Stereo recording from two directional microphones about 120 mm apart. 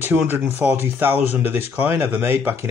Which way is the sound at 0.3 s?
15° right (ahead or behind).